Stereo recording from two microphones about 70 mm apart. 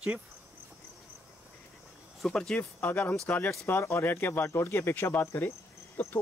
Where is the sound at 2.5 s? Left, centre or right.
Left.